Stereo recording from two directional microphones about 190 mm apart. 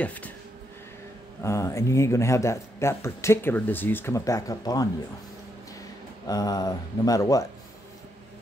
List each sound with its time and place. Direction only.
0.0 s speech: 10° left (ahead or behind)
1.4 s speech: 15° left (ahead or behind)
6.2 s speech: 20° left (ahead or behind)